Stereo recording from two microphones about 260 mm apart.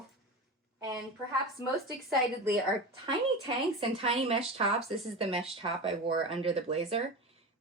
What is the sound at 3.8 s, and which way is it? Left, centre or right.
Speech, right.